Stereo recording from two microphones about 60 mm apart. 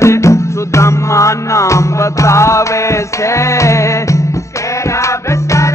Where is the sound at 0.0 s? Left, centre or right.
Left.